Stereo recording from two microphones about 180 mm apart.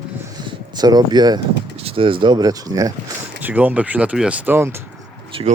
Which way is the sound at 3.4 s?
10° right (ahead or behind).